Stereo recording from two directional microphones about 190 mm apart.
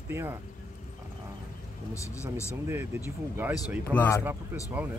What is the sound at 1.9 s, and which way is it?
Speech, 15° left (ahead or behind).